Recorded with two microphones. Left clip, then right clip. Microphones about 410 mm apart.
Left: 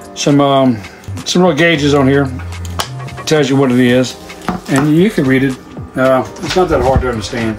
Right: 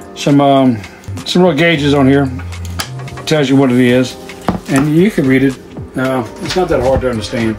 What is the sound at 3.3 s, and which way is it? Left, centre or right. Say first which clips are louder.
Speech: even; centre.